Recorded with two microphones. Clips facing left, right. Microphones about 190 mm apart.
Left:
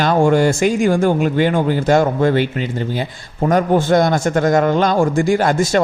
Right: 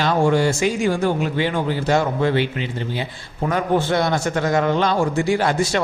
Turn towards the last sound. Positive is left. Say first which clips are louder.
# left 4 dB
turn(degrees=45)  # may be behind; listen again after turning